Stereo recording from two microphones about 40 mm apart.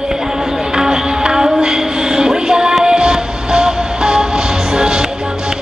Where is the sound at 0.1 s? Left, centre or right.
Centre.